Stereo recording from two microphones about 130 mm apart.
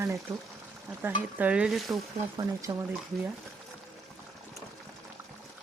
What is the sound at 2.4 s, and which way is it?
Speech, 25° right (ahead or behind).